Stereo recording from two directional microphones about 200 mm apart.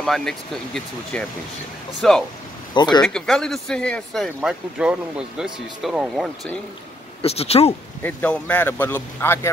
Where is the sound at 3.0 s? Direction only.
5° left (ahead or behind).